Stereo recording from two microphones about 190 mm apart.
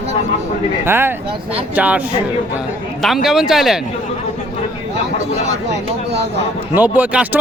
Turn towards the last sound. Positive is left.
turn(degrees=-10)  # may be behind; listen again after turning